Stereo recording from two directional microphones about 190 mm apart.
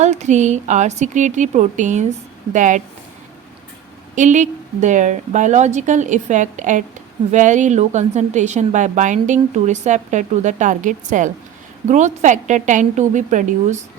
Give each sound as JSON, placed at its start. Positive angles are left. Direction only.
{"t": 0.0, "sound": "a woman's voice", "side_deg": -40}
{"t": 4.1, "sound": "a woman's voice", "side_deg": -40}